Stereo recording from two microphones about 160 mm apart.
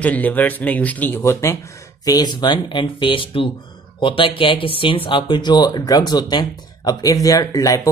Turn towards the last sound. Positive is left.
turn(degrees=20)  # may be behind; listen again after turning